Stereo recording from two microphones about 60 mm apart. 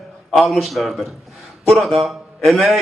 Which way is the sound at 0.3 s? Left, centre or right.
Centre.